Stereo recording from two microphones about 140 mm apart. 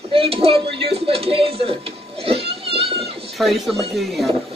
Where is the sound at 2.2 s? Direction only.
45° right (ahead or behind).